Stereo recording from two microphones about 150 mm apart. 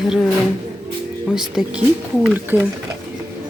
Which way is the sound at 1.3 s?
5° right (ahead or behind).